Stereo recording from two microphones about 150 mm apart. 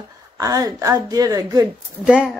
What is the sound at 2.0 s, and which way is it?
Speech, 5° right (ahead or behind).